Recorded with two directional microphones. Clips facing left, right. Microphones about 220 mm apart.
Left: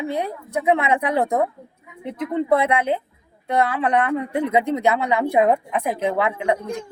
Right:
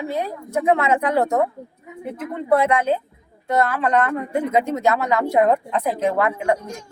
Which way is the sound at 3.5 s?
15° left (ahead or behind).